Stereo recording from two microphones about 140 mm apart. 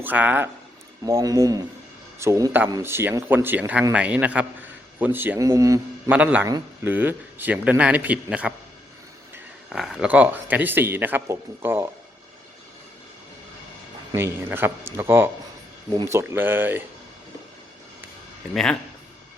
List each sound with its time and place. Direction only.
0.0 s speech: 10° right (ahead or behind)
1.0 s speech: 25° right (ahead or behind)
6.1 s speech: 10° right (ahead or behind)
9.6 s speech: 5° right (ahead or behind)
14.2 s speech: 15° right (ahead or behind)
18.5 s speech: 5° left (ahead or behind)